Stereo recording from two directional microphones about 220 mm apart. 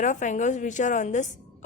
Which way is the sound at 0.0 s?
35° left (ahead or behind).